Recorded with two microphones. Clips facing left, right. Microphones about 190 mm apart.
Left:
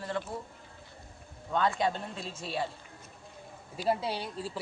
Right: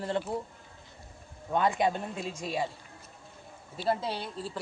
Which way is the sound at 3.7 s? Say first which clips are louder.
Even; 10° left (ahead or behind).